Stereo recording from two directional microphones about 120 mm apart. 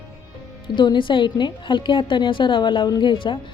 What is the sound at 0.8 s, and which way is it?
A woman's voice, 40° left (ahead or behind).